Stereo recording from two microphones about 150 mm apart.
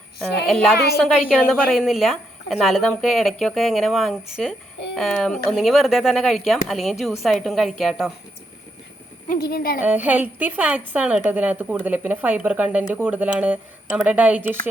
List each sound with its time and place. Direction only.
0.2 s a woman's voice: centre (ahead or behind)
9.3 s speech: 90° left
9.8 s a woman's voice: 10° right (ahead or behind)